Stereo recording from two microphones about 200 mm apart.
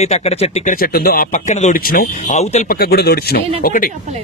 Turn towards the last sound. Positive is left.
turn(degrees=45)  # may be behind; listen again after turning